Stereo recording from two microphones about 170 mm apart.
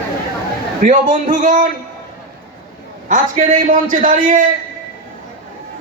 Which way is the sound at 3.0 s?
50° right (ahead or behind).